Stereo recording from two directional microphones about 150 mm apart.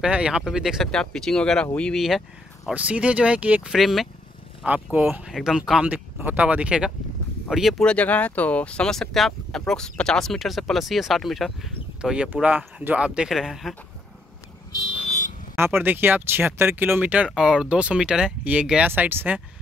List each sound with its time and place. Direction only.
0.0 s speech: 5° right (ahead or behind)
15.0 s a sound: 55° left (ahead or behind)
15.5 s speech: 15° right (ahead or behind)